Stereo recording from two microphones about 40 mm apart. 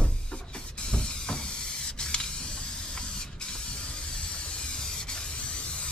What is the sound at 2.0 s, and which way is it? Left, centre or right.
Spray, left.